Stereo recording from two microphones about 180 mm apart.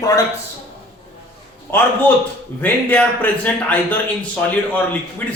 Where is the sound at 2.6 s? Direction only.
10° left (ahead or behind).